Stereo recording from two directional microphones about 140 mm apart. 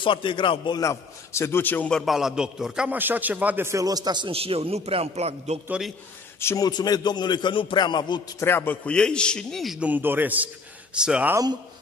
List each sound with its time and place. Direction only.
0.0 s a man's voice: 35° left (ahead or behind); by 5.6 s 50° right (ahead or behind)
5.7 s a man's voice: centre (ahead or behind)
6.4 s a man's voice: 25° left (ahead or behind)
8.4 s a man's voice: 15° left (ahead or behind); by 11.3 s 5° right (ahead or behind)